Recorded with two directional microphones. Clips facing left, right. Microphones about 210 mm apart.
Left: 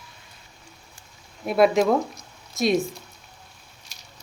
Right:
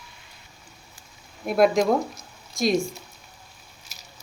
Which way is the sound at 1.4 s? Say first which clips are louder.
Left 1 dB; centre (ahead or behind).